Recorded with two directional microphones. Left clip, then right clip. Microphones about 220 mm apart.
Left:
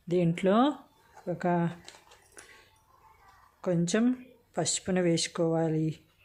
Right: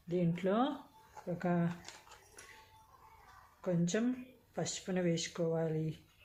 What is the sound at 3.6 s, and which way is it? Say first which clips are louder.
Speech: left 7 dB; 50° left (ahead or behind).